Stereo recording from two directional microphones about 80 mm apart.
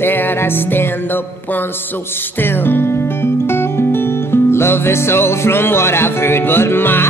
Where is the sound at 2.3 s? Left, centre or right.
Left.